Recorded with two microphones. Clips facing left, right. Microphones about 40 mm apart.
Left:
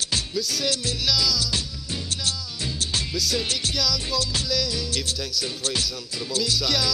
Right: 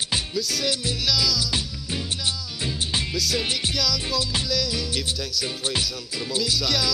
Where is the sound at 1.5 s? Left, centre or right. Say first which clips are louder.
Right 1 dB; centre.